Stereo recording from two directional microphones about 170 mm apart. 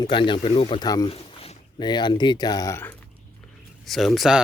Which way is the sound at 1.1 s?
35° left (ahead or behind).